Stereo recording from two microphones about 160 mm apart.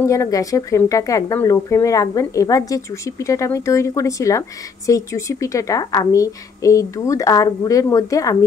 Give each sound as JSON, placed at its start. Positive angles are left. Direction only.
{"t": 0.0, "sound": "speech", "side_deg": 20}